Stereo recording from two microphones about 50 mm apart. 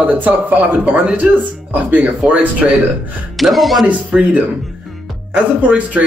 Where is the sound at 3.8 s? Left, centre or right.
Right.